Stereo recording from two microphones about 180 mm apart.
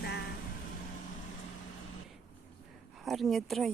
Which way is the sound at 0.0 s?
60° left (ahead or behind).